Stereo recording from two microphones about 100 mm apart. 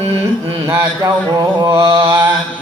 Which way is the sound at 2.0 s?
40° right (ahead or behind).